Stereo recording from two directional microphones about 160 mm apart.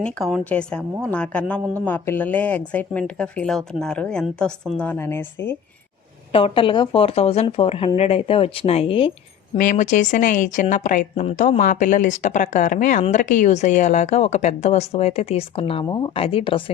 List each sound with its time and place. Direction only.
0.0 s a woman's voice: centre (ahead or behind)
6.3 s speech: 35° left (ahead or behind)
9.6 s speech: 55° left (ahead or behind); by 16.7 s 35° left (ahead or behind)